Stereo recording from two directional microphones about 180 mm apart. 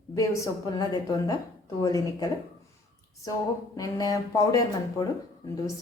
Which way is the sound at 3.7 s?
20° left (ahead or behind).